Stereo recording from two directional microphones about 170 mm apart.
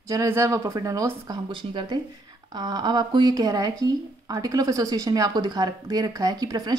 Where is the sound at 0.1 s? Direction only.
15° right (ahead or behind).